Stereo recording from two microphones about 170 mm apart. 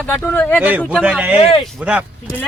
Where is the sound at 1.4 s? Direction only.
35° left (ahead or behind).